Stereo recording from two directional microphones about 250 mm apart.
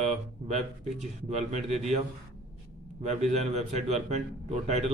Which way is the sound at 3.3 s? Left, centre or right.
Right.